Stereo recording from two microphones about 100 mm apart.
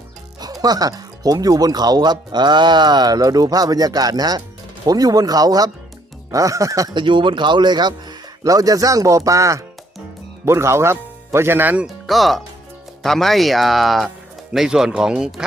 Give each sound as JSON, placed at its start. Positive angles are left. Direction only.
{"t": 0.6, "sound": "speech", "side_deg": -40}
{"t": 6.9, "sound": "speech", "side_deg": -55}
{"t": 8.4, "sound": "speech", "side_deg": -35}
{"t": 12.0, "sound": "speech", "side_deg": 0}